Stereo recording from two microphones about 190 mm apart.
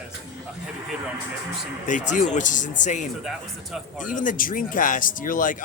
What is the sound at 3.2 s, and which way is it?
Speech, centre (ahead or behind).